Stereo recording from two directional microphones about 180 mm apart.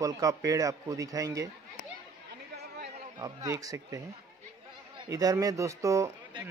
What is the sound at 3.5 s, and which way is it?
Speech, 20° right (ahead or behind).